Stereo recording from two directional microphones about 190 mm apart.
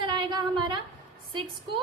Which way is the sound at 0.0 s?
25° right (ahead or behind).